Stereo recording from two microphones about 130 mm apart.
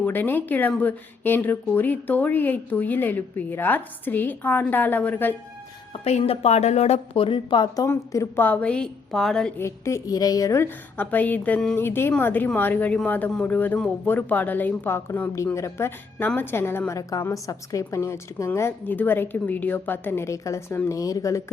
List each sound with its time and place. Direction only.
0.0 s speech: 15° left (ahead or behind)
5.9 s a woman's voice: 50° left (ahead or behind); by 7.9 s 35° left (ahead or behind)
7.9 s a woman's voice: 20° left (ahead or behind)
8.4 s a woman's voice: 10° left (ahead or behind)
9.6 s a woman's voice: 20° left (ahead or behind)